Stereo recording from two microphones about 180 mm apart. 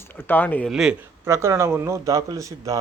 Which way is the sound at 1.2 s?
15° right (ahead or behind).